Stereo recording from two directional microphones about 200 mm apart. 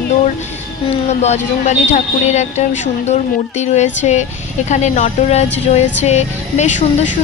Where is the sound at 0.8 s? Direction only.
35° left (ahead or behind).